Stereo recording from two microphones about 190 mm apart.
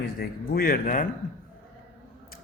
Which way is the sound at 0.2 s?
50° left (ahead or behind).